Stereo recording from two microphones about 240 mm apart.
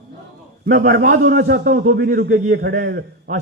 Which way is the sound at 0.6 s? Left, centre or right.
Right.